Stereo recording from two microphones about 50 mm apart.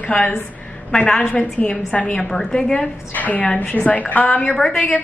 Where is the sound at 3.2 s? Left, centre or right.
Left.